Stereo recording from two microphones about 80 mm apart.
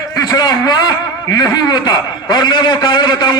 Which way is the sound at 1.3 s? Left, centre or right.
Left.